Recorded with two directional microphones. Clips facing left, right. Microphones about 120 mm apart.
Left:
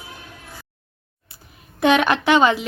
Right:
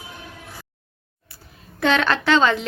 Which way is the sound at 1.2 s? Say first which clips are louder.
Right 2 dB; 15° left (ahead or behind).